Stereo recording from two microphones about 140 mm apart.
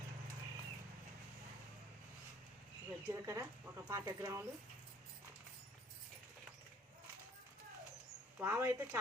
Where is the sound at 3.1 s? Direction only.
20° right (ahead or behind).